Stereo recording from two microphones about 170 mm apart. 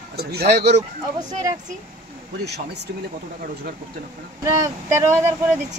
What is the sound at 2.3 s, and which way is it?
Speech, 75° right (ahead or behind).